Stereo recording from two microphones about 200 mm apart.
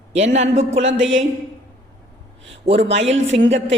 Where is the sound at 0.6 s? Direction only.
65° right (ahead or behind).